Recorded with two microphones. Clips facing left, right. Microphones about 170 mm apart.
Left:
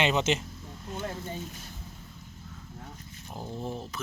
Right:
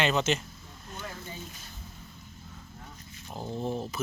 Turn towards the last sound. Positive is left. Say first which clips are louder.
# right 2 dB
turn(degrees=-25)  # may be behind; listen again after turning